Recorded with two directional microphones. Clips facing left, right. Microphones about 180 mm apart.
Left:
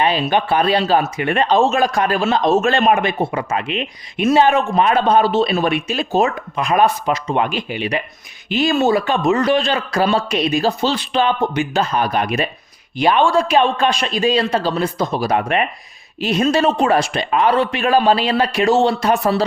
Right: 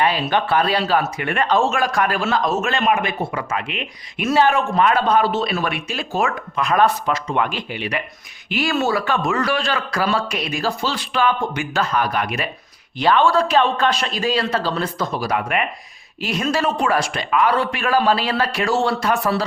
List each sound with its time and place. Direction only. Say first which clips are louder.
0.0 s a man's voice: left 2 dB; 20° left (ahead or behind)